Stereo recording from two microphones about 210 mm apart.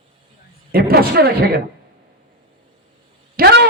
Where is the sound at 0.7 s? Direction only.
45° right (ahead or behind).